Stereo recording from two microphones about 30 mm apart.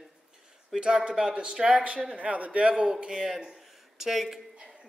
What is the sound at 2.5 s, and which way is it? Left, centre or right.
Speech, right.